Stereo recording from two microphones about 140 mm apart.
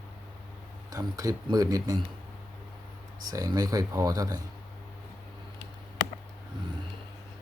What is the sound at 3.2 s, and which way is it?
Speech, 25° right (ahead or behind).